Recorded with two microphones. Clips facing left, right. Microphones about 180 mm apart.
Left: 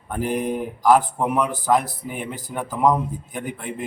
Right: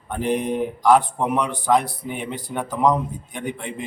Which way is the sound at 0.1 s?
5° left (ahead or behind).